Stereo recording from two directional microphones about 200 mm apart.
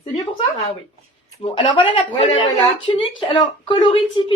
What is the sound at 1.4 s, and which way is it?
Speech, 30° left (ahead or behind).